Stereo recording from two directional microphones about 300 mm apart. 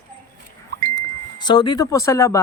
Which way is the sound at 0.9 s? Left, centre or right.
Centre.